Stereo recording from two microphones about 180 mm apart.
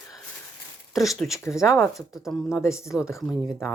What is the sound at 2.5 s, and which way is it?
Speech, 15° left (ahead or behind).